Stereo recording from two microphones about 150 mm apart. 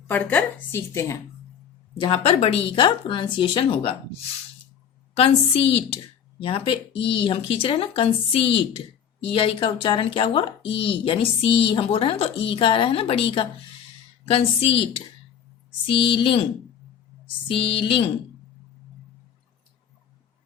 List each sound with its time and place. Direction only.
0.1 s a woman's voice: 10° left (ahead or behind)
2.0 s speech: 35° left (ahead or behind)
5.1 s speech: 40° left (ahead or behind)